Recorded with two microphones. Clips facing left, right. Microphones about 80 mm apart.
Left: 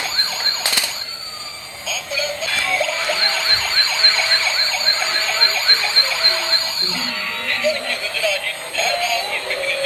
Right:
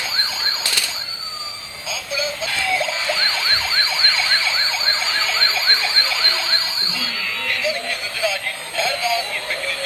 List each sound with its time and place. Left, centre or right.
1.9 s synthetic singing: centre
7.6 s synthetic singing: centre